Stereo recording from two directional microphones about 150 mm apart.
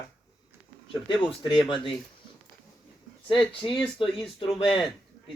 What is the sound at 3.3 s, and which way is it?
Speech, 35° left (ahead or behind).